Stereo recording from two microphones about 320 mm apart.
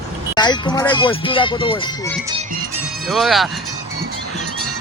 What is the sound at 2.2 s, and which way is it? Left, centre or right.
Speech, centre.